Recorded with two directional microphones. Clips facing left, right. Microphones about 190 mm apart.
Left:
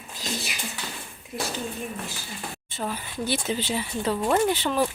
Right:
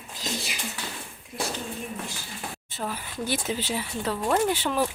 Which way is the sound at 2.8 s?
5° right (ahead or behind).